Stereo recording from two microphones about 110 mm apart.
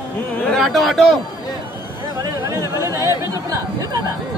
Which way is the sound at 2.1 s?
35° right (ahead or behind).